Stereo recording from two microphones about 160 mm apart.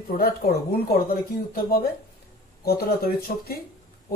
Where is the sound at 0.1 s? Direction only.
65° left (ahead or behind).